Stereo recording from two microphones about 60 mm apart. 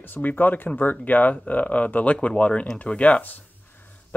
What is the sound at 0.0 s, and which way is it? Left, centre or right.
Speech, left.